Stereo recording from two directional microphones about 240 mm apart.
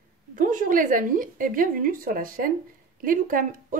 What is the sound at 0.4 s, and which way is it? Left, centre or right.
Speech, right.